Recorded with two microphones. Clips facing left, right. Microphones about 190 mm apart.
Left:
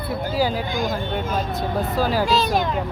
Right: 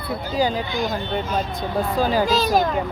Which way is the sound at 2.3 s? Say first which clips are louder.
Right 1 dB; 40° right (ahead or behind).